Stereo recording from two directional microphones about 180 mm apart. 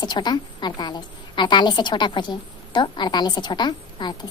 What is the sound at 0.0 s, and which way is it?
A woman's voice, 25° left (ahead or behind).